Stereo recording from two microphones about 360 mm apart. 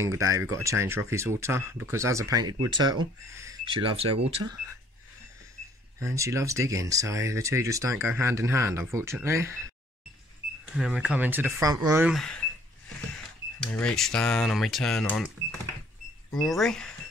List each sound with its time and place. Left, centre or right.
0.0 s speech: centre
5.9 s speech: centre
10.8 s speech: centre
13.6 s speech: centre
16.3 s speech: centre